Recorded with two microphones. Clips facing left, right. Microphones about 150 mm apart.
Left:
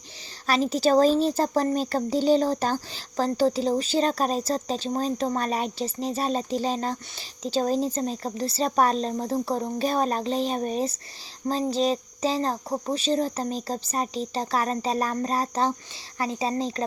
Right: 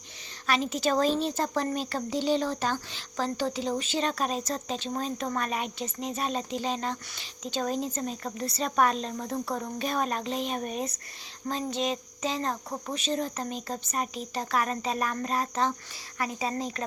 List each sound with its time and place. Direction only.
0.4 s speech: 35° left (ahead or behind)